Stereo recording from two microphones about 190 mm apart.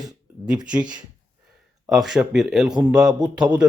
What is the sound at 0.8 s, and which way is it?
Speech, 20° right (ahead or behind).